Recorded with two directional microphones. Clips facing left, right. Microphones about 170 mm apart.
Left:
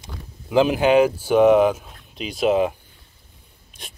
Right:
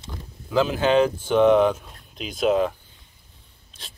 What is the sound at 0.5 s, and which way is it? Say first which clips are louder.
Speech: left 3 dB; 15° left (ahead or behind).